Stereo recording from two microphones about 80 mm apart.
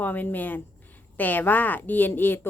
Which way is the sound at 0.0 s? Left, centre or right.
Left.